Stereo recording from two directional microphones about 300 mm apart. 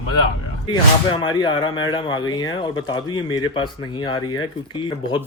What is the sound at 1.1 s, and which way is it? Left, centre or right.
Speech, centre.